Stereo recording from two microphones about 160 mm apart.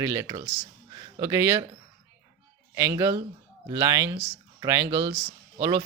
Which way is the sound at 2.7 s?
15° right (ahead or behind).